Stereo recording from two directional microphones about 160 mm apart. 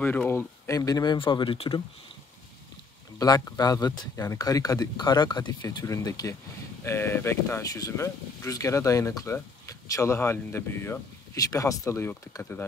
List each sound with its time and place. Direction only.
0.0 s speech: 10° left (ahead or behind); by 1.8 s 30° left (ahead or behind)
3.2 s speech: 20° left (ahead or behind)